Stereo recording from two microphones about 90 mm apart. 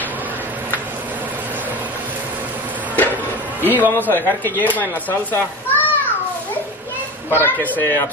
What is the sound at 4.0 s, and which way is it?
A child's voice, 20° left (ahead or behind).